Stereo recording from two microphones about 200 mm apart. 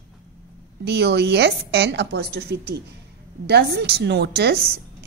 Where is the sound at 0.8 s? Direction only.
55° right (ahead or behind).